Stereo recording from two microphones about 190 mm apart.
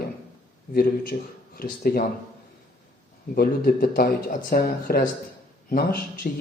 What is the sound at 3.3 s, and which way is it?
Speech, 50° left (ahead or behind).